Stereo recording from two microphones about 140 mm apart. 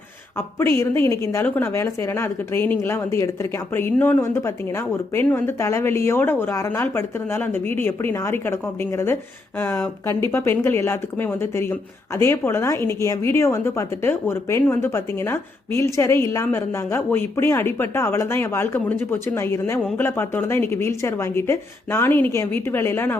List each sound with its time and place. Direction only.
0.8 s a woman's voice: 20° left (ahead or behind)